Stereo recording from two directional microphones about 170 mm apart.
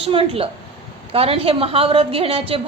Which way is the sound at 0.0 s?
35° right (ahead or behind).